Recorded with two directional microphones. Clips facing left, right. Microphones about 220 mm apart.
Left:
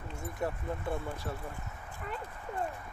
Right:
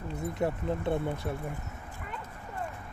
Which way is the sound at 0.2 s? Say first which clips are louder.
Right 5 dB; 25° right (ahead or behind).